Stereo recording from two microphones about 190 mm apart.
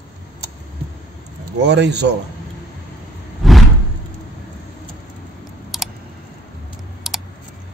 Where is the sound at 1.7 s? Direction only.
65° right (ahead or behind).